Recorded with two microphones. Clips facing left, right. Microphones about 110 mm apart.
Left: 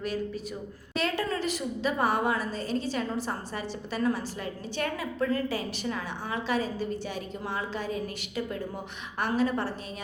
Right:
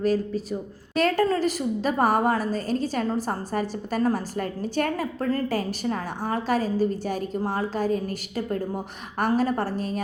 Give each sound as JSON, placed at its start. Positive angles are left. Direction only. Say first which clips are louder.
{"t": 0.0, "sound": "a woman's voice", "louder": "right 8 dB", "side_deg": -35}